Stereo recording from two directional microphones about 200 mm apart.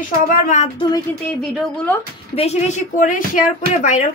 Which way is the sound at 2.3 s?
30° left (ahead or behind).